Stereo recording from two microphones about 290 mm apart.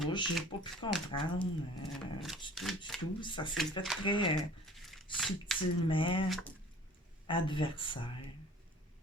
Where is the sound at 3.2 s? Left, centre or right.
Centre.